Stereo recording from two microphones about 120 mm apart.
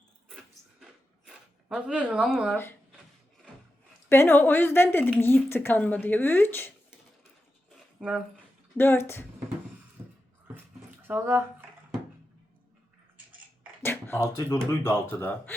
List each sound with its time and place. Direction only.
0.3 s dog: 5° right (ahead or behind)
1.3 s speech: 10° right (ahead or behind)
4.1 s a woman's voice: 20° left (ahead or behind)
7.9 s speech: 5° right (ahead or behind)
8.8 s speech: 20° left (ahead or behind)
10.0 s beatboxing: 15° right (ahead or behind)
10.5 s a sound: 15° right (ahead or behind)
13.8 s speech: 20° left (ahead or behind)